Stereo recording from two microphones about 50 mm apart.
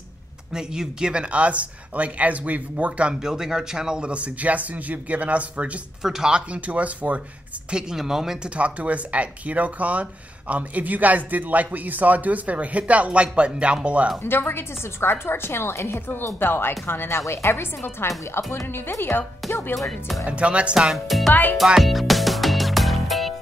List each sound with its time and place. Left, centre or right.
0.5 s speech: centre
1.3 s speech: right
3.2 s speech: centre
4.1 s speech: right
6.0 s speech: centre
6.5 s speech: right
7.7 s speech: centre
8.5 s speech: right
14.2 s a woman's voice: left
20.2 s speech: right
20.7 s speech: centre
21.3 s speech: left
21.7 s music: centre